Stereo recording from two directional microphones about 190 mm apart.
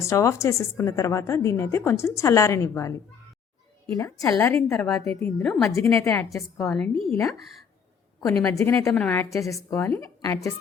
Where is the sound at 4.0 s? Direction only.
15° left (ahead or behind).